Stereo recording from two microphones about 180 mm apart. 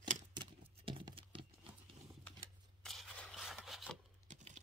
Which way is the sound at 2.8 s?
5° left (ahead or behind).